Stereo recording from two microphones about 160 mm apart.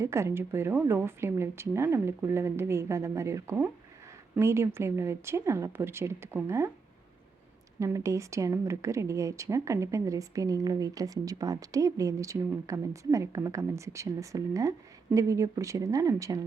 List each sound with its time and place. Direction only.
0.0 s a woman's voice: 15° right (ahead or behind)
7.8 s speech: 20° right (ahead or behind)